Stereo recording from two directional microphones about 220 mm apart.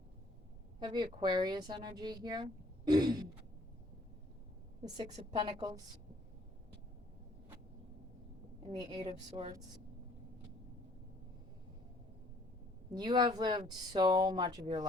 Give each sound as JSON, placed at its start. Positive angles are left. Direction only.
{"t": 0.8, "sound": "speech", "side_deg": -20}
{"t": 4.8, "sound": "speech", "side_deg": -25}
{"t": 8.8, "sound": "speech", "side_deg": -20}
{"t": 12.9, "sound": "speech", "side_deg": -20}